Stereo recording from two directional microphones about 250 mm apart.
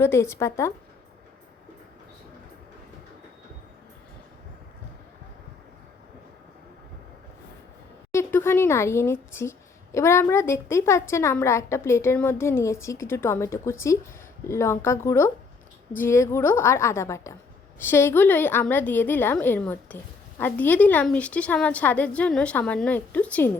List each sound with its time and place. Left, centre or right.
0.0 s speech: centre
8.1 s a woman's voice: centre